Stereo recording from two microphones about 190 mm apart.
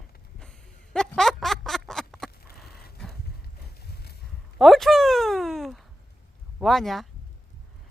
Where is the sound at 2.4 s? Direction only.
55° left (ahead or behind).